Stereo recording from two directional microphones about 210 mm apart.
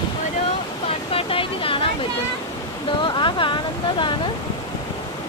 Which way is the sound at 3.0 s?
20° left (ahead or behind).